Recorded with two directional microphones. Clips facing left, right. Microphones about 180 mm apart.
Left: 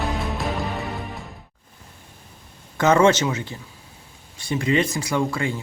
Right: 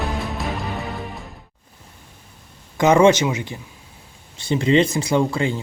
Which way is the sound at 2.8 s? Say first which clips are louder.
Right 3 dB; 15° right (ahead or behind).